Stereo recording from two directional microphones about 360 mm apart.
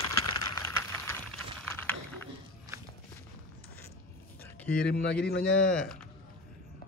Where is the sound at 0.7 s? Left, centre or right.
Centre.